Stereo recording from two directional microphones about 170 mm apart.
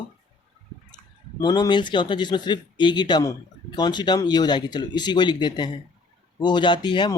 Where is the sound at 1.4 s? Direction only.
25° left (ahead or behind).